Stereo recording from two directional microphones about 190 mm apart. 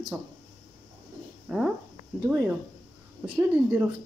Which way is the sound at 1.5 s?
5° right (ahead or behind).